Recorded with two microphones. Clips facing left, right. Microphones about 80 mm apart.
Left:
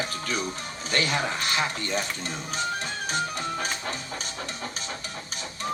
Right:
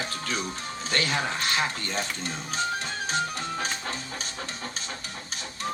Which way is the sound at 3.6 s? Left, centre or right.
Centre.